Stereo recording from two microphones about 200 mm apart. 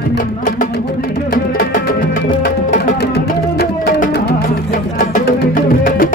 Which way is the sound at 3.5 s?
50° left (ahead or behind).